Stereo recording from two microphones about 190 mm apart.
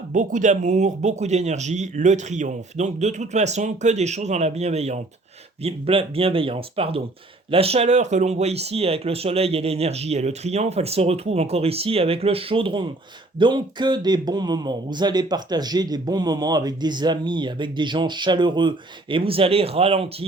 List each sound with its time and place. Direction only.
0.1 s speech: 40° right (ahead or behind)